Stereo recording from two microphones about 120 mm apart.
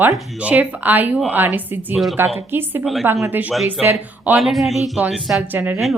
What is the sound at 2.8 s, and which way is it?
Speech, centre (ahead or behind).